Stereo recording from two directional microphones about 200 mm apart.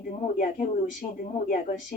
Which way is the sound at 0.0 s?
40° left (ahead or behind).